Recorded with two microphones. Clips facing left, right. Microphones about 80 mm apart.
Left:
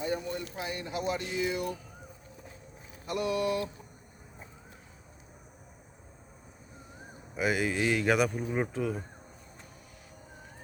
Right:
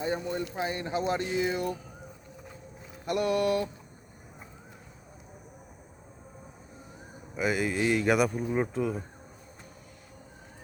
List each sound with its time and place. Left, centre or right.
0.0 s speech: right
3.1 s a sound: right
7.3 s speech: centre